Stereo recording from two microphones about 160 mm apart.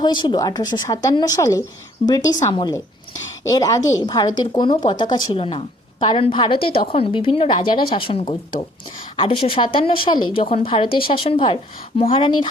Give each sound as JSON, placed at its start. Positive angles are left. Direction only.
{"t": 0.0, "sound": "a woman's voice", "side_deg": 30}